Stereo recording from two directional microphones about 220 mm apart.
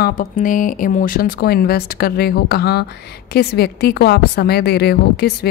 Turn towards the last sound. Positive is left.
turn(degrees=45)  # may be behind; listen again after turning